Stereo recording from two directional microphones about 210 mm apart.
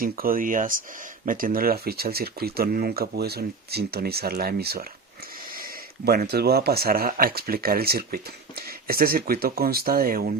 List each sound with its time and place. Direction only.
0.0 s speech: 45° right (ahead or behind)